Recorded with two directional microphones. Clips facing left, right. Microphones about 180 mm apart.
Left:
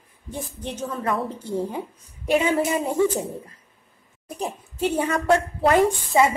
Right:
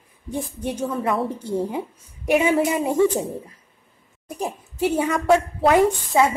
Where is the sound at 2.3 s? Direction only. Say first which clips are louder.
Right 2 dB; 15° right (ahead or behind).